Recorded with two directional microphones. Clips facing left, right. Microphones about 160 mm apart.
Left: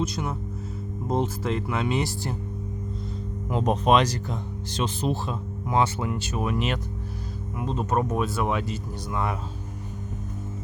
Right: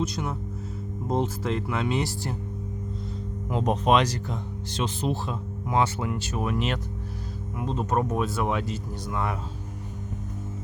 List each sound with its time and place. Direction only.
0.0 s speech: 10° left (ahead or behind)
3.5 s speech: 40° left (ahead or behind); by 9.2 s 10° left (ahead or behind)